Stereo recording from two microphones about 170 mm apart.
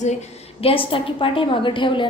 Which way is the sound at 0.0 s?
40° left (ahead or behind).